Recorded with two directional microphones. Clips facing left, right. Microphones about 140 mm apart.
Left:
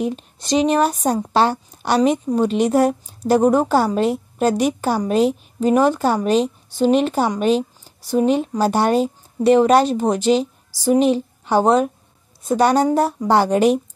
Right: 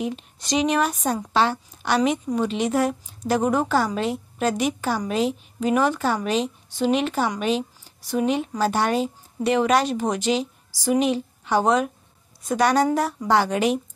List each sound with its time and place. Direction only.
0.0 s speech: 35° left (ahead or behind)